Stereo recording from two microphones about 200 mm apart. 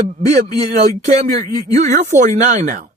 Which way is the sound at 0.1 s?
35° right (ahead or behind).